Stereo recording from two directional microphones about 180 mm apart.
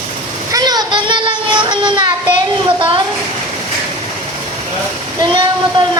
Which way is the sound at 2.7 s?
25° right (ahead or behind).